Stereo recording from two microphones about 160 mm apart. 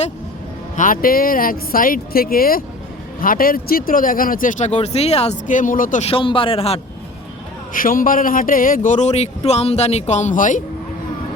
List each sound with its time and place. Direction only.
0.8 s a man's voice: 60° left (ahead or behind)
6.1 s speech: 35° left (ahead or behind)
7.7 s a man's voice: 60° left (ahead or behind)